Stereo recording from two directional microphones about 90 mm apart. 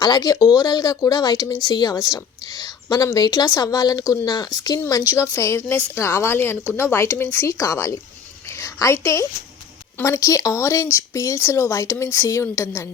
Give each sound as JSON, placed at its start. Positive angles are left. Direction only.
{"t": 0.0, "sound": "speech", "side_deg": 45}
{"t": 0.3, "sound": "speech", "side_deg": -10}
{"t": 0.6, "sound": "a woman's voice", "side_deg": 45}
{"t": 5.0, "sound": "a woman's voice", "side_deg": 30}